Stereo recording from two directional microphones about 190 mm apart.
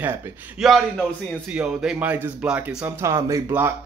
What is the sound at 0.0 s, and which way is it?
Speech, 10° right (ahead or behind).